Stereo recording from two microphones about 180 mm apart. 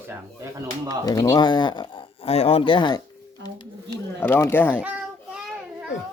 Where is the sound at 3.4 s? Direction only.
25° left (ahead or behind).